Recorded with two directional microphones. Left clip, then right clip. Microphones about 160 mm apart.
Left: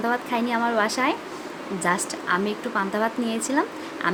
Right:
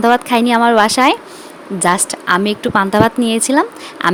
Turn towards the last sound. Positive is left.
turn(degrees=-70)  # may be behind; listen again after turning